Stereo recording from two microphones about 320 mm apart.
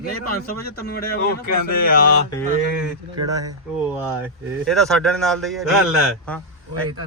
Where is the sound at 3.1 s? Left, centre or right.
Centre.